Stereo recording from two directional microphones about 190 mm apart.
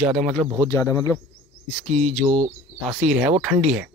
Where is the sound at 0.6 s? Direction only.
15° left (ahead or behind).